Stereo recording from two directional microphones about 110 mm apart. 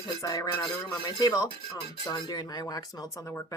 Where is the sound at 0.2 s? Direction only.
30° left (ahead or behind).